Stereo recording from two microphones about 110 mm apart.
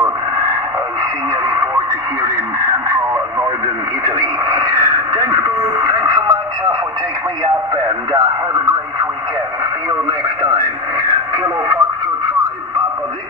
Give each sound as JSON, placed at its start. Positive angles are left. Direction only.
{"t": 1.4, "sound": "a sound", "side_deg": -35}
{"t": 4.0, "sound": "radio", "side_deg": -35}
{"t": 9.8, "sound": "radio", "side_deg": -40}